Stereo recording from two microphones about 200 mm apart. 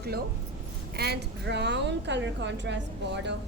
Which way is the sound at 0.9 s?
55° right (ahead or behind).